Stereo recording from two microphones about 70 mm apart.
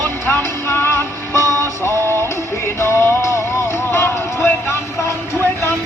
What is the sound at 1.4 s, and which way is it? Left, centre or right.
Music, right.